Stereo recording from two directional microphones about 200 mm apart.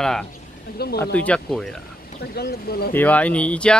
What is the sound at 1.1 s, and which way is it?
Speech, 5° left (ahead or behind).